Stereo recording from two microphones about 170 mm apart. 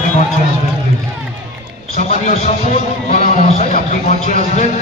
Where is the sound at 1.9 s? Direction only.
40° left (ahead or behind).